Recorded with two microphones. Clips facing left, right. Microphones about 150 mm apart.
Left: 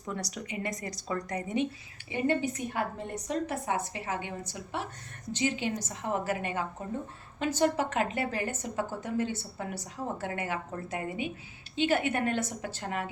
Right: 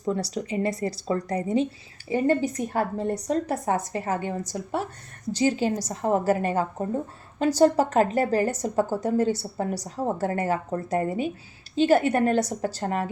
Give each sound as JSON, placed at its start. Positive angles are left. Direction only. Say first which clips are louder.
{"t": 0.0, "sound": "a woman's voice", "louder": "right 10 dB", "side_deg": -30}